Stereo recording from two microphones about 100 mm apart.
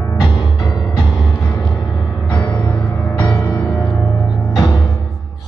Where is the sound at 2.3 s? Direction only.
15° left (ahead or behind).